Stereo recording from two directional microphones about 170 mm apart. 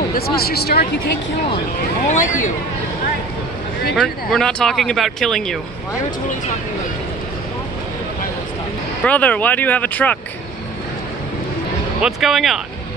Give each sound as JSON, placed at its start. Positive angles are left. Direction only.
{"t": 0.4, "sound": "speech", "side_deg": 65}
{"t": 2.0, "sound": "speech", "side_deg": 45}
{"t": 3.9, "sound": "speech", "side_deg": 0}
{"t": 9.0, "sound": "speech", "side_deg": 10}
{"t": 12.0, "sound": "speech", "side_deg": 0}